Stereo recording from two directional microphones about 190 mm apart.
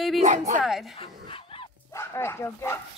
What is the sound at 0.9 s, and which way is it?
Speech, 30° left (ahead or behind).